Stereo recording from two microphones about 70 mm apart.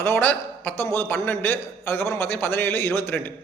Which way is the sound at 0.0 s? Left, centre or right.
Left.